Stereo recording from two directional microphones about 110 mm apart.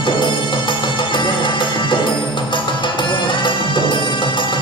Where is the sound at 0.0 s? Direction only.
45° left (ahead or behind).